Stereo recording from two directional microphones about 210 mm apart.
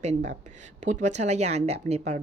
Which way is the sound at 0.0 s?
35° right (ahead or behind).